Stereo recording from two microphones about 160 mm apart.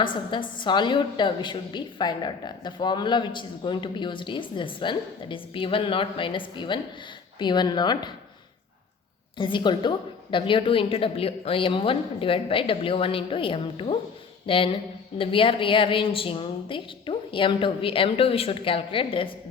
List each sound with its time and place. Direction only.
0.0 s a woman's voice: 30° left (ahead or behind)
9.4 s a woman's voice: 30° left (ahead or behind)